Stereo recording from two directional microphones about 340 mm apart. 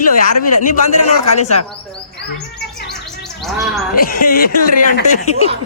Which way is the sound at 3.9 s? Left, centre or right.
Left.